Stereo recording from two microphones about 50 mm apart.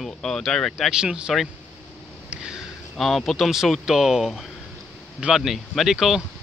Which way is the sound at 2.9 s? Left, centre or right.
Centre.